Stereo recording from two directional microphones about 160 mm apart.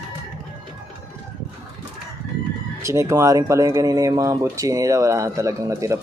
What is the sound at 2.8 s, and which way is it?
Speech, 20° right (ahead or behind).